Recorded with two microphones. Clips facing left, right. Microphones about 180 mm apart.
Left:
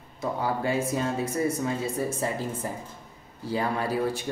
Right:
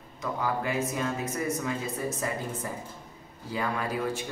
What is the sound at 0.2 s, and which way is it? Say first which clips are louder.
Speech: left 2 dB; 30° left (ahead or behind).